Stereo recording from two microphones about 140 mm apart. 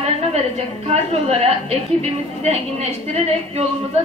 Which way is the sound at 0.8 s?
50° right (ahead or behind).